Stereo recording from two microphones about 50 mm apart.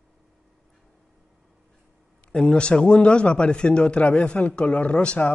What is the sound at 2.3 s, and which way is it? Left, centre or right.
A man's voice, centre.